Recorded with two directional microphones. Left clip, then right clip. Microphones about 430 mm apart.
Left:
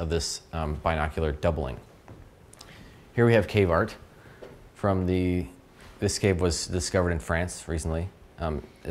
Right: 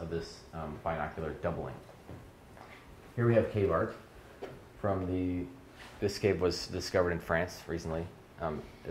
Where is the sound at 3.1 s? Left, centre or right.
Left.